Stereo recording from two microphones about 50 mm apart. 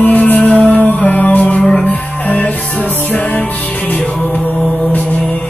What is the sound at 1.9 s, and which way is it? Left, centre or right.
Music, left.